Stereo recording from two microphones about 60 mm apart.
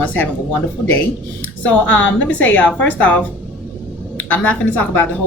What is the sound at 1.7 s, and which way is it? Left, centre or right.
A woman's voice, left.